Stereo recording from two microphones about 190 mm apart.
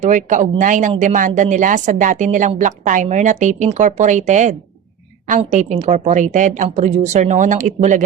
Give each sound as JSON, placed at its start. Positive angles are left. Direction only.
{"t": 0.0, "sound": "speech", "side_deg": -40}